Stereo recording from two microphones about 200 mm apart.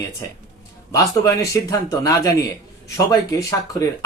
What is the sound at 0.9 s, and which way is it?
Speech, 15° left (ahead or behind).